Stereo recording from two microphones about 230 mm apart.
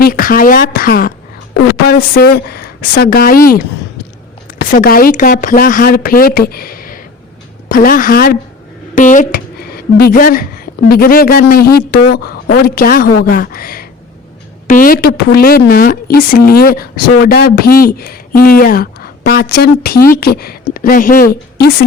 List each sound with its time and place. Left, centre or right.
0.0 s a woman's voice: left